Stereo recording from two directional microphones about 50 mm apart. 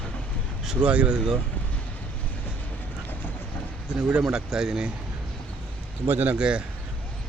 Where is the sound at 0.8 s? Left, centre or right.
Right.